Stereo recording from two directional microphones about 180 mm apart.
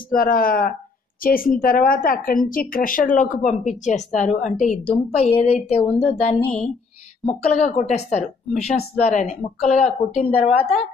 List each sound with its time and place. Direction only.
0.1 s a woman's voice: 50° left (ahead or behind); by 5.9 s 35° left (ahead or behind)
6.4 s a woman's voice: 5° left (ahead or behind)
7.2 s a woman's voice: 40° left (ahead or behind)